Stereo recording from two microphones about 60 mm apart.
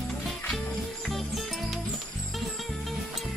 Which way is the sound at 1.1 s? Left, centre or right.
Centre.